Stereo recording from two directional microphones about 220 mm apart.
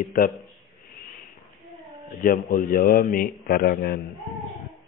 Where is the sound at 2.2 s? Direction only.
40° left (ahead or behind).